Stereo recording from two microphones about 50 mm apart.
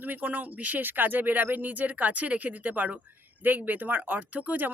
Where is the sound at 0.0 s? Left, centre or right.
Right.